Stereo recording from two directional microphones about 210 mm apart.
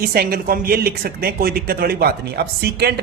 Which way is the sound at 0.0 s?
45° right (ahead or behind).